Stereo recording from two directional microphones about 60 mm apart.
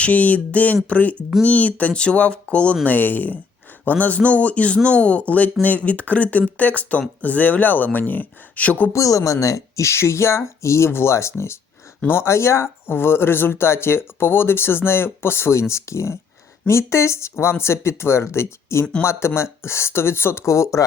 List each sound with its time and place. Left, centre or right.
0.0 s speech: left
8.9 s speech: left